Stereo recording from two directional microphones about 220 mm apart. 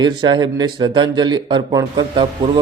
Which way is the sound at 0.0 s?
20° right (ahead or behind).